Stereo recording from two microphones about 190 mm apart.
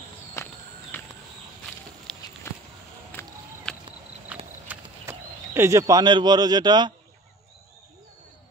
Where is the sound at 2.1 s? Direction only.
Centre (ahead or behind).